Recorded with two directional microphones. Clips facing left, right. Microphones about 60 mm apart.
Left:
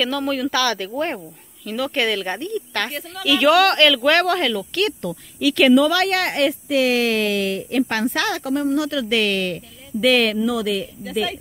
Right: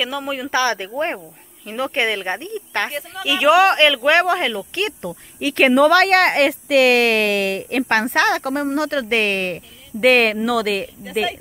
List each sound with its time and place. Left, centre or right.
0.0 s speech: centre
5.5 s speech: right
10.4 s speech: right